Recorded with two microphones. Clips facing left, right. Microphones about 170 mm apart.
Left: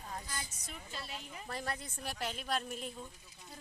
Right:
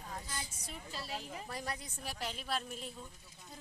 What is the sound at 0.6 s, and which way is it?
Speech, 35° right (ahead or behind).